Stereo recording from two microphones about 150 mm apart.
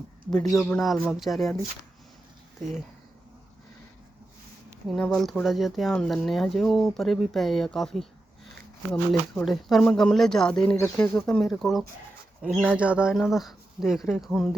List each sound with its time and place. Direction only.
0.3 s speech: centre (ahead or behind)
4.9 s speech: centre (ahead or behind)
10.8 s speech: 20° left (ahead or behind)
11.1 s speech: 5° left (ahead or behind)